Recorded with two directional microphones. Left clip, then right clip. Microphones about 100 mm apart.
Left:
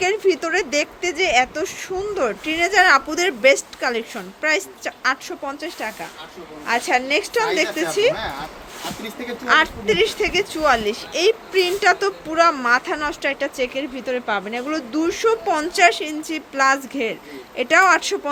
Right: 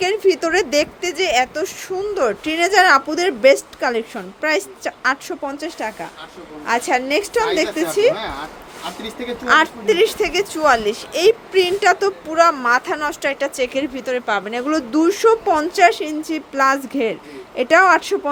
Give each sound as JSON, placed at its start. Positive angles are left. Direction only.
{"t": 0.0, "sound": "a sound", "side_deg": -35}
{"t": 0.4, "sound": "speech", "side_deg": -45}
{"t": 3.1, "sound": "a woman's voice", "side_deg": -30}
{"t": 9.5, "sound": "speech", "side_deg": -40}
{"t": 15.4, "sound": "a woman's voice", "side_deg": -35}